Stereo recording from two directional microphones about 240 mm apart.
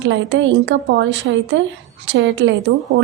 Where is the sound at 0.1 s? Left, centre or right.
Right.